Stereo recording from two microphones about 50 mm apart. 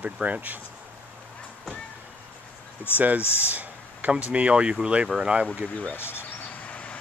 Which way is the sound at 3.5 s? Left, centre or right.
Right.